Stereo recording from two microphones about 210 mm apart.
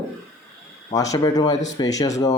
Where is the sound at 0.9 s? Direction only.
15° left (ahead or behind).